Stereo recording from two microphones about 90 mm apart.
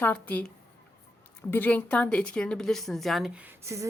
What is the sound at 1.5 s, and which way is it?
A woman's voice, 20° left (ahead or behind).